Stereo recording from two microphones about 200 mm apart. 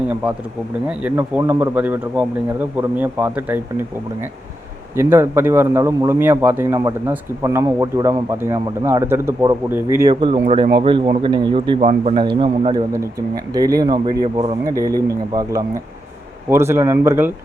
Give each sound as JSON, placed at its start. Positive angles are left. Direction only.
{"t": 0.9, "sound": "a man's voice", "side_deg": -10}
{"t": 4.9, "sound": "a man's voice", "side_deg": -15}